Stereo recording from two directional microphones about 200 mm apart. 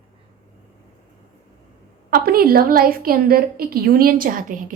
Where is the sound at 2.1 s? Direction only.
50° right (ahead or behind).